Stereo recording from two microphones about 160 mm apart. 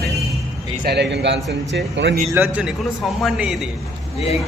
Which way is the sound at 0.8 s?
90° right.